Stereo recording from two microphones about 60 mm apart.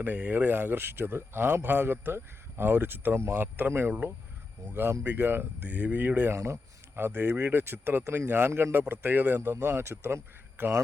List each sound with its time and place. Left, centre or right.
0.0 s speech: right
6.3 s speech: right
9.4 s speech: right